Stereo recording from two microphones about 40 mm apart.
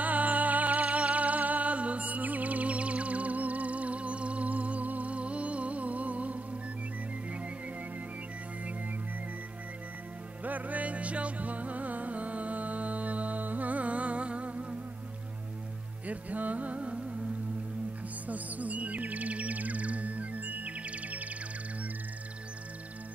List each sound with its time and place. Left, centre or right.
0.0 s music: right
10.4 s music: right
16.1 s music: right
18.2 s music: right